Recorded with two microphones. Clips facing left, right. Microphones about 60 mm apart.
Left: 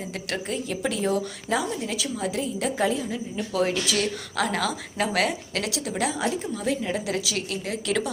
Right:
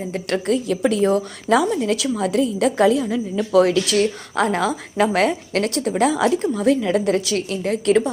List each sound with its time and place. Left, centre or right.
0.3 s a woman's voice: right
1.7 s a woman's voice: right
3.9 s a woman's voice: right
6.1 s a woman's voice: right
6.5 s a woman's voice: right